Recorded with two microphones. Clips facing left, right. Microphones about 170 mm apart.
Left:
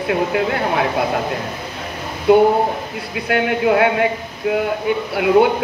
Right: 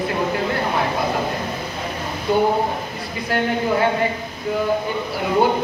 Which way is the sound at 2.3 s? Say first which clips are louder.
Left 6 dB; 65° left (ahead or behind).